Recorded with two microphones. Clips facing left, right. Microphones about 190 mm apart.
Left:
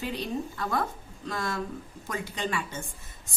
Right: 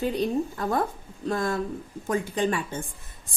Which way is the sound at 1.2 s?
40° right (ahead or behind).